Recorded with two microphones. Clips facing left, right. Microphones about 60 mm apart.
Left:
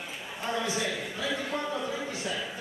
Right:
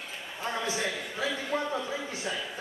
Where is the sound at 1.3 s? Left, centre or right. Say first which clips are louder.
Even; centre.